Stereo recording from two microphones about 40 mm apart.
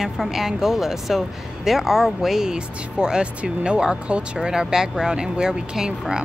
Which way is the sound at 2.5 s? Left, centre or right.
Right.